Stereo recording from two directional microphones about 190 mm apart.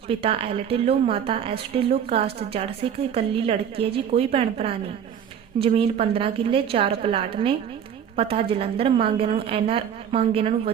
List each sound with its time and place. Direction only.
0.1 s a woman's voice: 30° right (ahead or behind)